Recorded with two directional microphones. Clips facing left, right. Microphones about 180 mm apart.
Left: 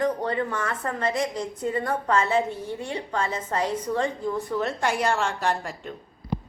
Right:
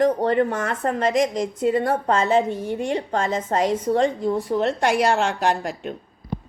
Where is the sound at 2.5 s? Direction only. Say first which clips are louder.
Right 7 dB; 90° right.